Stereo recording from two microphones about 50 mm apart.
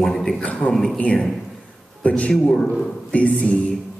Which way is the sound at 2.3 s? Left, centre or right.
Centre.